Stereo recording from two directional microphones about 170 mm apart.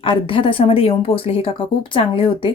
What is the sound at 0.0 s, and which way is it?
Speech, 30° left (ahead or behind).